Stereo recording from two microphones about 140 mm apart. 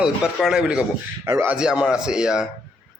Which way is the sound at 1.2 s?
20° right (ahead or behind).